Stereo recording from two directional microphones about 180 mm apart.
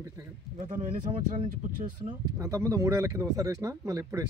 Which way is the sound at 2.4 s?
15° right (ahead or behind).